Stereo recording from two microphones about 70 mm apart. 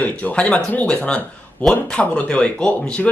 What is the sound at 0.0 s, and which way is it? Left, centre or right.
Speech, centre.